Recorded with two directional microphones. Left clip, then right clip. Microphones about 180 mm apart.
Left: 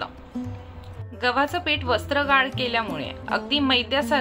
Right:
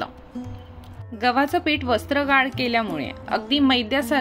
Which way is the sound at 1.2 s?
40° right (ahead or behind).